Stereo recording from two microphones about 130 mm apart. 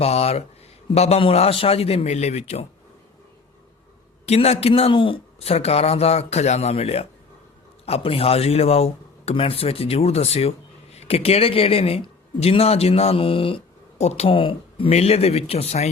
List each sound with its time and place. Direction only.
0.0 s a man's voice: 50° left (ahead or behind)
4.3 s a man's voice: 55° left (ahead or behind)
14.0 s speech: 55° left (ahead or behind)
14.3 s a man's voice: 40° left (ahead or behind)